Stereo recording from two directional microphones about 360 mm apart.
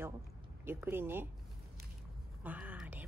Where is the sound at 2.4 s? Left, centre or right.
Centre.